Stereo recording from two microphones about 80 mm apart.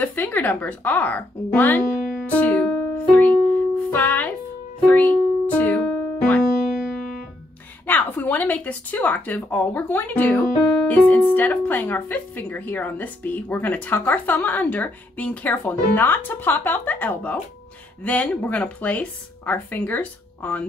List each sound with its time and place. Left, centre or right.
0.0 s speech: left
2.2 s music: left
7.8 s speech: left